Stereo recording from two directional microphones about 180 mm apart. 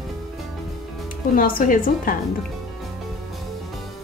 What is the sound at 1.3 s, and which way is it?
Speech, 50° left (ahead or behind).